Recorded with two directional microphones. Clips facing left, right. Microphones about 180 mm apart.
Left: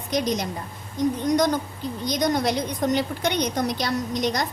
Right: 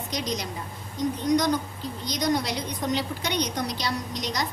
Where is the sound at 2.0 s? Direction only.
50° left (ahead or behind).